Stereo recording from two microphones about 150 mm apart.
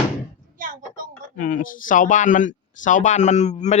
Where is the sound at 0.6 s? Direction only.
65° right (ahead or behind).